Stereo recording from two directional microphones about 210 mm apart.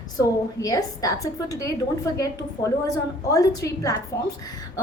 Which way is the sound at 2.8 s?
15° left (ahead or behind).